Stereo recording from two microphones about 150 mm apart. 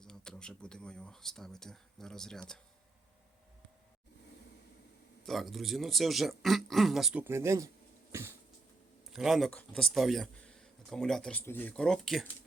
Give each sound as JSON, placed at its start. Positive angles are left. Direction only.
{"t": 0.0, "sound": "speech", "side_deg": 5}
{"t": 5.2, "sound": "speech", "side_deg": 0}
{"t": 8.1, "sound": "cough", "side_deg": -15}
{"t": 9.0, "sound": "speech", "side_deg": 0}